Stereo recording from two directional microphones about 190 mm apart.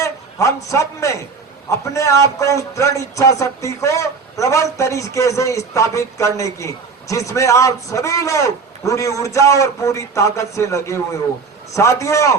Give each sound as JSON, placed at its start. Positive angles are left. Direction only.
{"t": 0.0, "sound": "a man's voice", "side_deg": 15}